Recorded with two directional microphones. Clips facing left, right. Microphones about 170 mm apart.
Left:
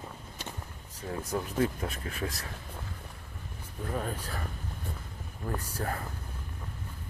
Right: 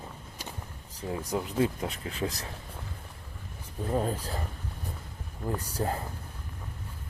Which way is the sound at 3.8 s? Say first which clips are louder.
Right 5 dB; 25° right (ahead or behind).